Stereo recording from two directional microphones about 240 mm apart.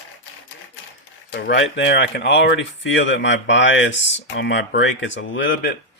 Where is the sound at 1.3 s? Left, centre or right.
Left.